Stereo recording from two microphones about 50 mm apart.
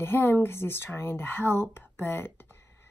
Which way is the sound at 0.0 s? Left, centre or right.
Left.